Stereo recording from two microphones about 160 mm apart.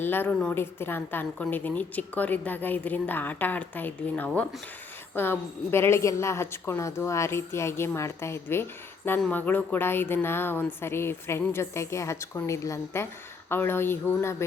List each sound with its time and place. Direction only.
0.0 s a woman's voice: 15° left (ahead or behind)